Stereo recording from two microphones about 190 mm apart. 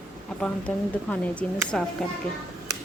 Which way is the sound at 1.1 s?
5° left (ahead or behind).